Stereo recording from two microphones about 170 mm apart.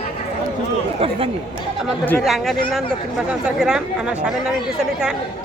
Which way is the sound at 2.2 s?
Centre (ahead or behind).